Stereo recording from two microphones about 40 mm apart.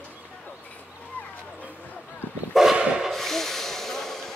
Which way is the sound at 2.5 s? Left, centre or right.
Centre.